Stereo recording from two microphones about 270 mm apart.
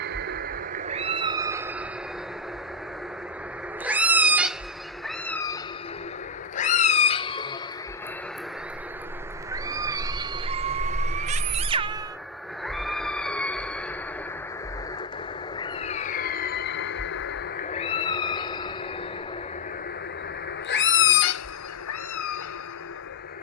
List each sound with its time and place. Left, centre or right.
0.0 s cat: right; by 1.7 s centre
3.8 s cat: centre
5.0 s cat: centre
6.6 s cat: left
9.5 s a sound: centre
12.6 s a sound: centre
15.5 s a sound: centre; by 17.4 s left
17.6 s cat: left
20.7 s cat: left